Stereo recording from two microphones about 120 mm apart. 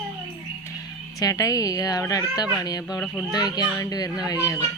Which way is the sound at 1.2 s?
30° left (ahead or behind).